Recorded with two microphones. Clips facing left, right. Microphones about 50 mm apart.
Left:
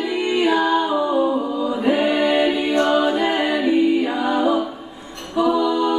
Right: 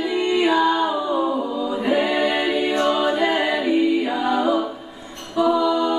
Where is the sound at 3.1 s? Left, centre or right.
Centre.